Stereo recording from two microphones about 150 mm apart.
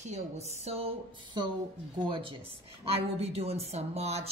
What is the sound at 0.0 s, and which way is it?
Speech, 45° right (ahead or behind).